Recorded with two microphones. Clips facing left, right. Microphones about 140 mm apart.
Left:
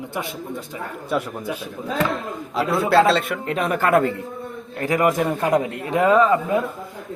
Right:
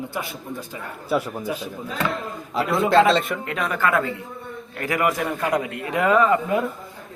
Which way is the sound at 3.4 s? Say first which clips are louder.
Left 3 dB; 35° left (ahead or behind).